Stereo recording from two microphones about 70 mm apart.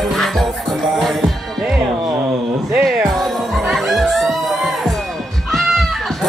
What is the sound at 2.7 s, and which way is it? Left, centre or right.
Music, centre.